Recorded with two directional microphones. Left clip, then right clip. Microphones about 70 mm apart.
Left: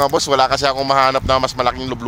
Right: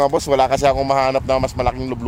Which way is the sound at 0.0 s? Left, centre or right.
Right.